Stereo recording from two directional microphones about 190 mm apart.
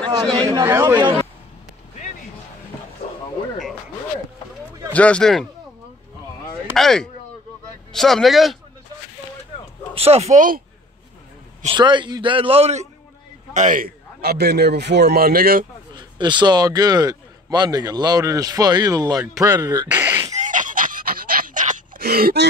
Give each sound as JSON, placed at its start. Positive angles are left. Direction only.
{"t": 0.4, "sound": "a man's voice", "side_deg": -15}
{"t": 4.9, "sound": "speech", "side_deg": 5}
{"t": 6.7, "sound": "speech", "side_deg": 0}
{"t": 9.9, "sound": "speech", "side_deg": -30}
{"t": 11.6, "sound": "a man's voice", "side_deg": -25}
{"t": 15.9, "sound": "a man's voice", "side_deg": -25}
{"t": 19.9, "sound": "sneeze", "side_deg": -10}
{"t": 20.3, "sound": "gasp", "side_deg": -40}